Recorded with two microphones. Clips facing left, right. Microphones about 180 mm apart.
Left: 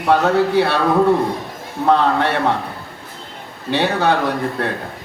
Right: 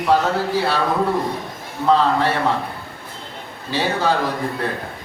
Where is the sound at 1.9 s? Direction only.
60° left (ahead or behind).